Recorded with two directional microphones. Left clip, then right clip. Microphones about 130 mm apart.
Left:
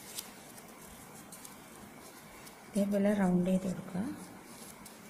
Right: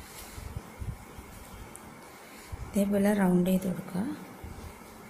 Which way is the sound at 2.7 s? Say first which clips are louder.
Right 4 dB; 15° right (ahead or behind).